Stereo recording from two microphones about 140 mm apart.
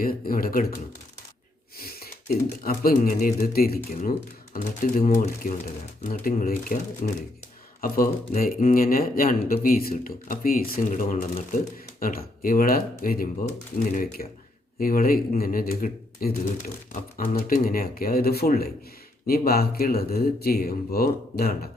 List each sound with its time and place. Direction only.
0.0 s speech: 90° left
1.8 s a sound: 90° left
2.6 s speech: 85° left
7.0 s speech: 55° left (ahead or behind)
7.8 s speech: 90° left